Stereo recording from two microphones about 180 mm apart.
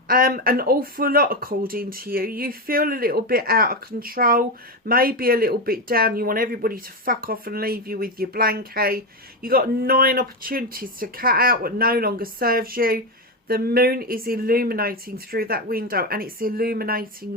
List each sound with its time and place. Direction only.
0.1 s speech: 55° right (ahead or behind)